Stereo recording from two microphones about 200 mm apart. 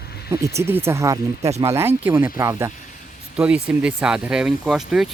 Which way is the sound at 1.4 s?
35° right (ahead or behind).